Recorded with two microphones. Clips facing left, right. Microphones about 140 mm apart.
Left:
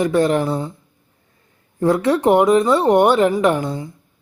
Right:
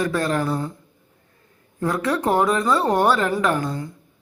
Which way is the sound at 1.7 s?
25° left (ahead or behind).